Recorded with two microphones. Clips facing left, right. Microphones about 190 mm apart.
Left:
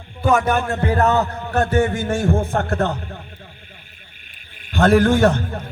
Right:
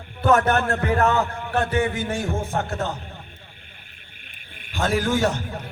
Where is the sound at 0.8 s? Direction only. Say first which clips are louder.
Left 3 dB; 35° left (ahead or behind); by 3.0 s 60° left (ahead or behind).